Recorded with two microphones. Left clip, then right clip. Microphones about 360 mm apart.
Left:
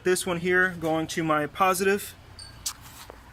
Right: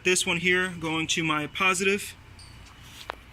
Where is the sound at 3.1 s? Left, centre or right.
Right.